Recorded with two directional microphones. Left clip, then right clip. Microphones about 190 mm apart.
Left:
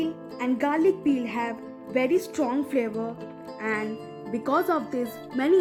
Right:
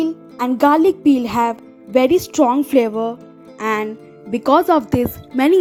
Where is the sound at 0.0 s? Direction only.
35° right (ahead or behind).